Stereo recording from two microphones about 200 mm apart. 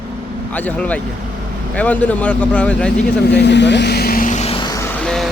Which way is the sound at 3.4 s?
60° left (ahead or behind).